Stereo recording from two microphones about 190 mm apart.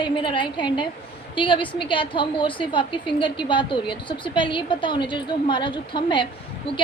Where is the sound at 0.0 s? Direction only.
25° left (ahead or behind).